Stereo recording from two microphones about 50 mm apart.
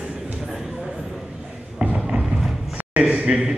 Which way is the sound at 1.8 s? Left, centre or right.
Right.